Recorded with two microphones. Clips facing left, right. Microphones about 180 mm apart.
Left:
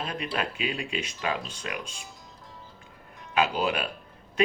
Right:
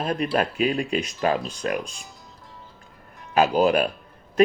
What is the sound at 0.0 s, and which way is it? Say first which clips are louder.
Speech: right 8 dB; 45° right (ahead or behind).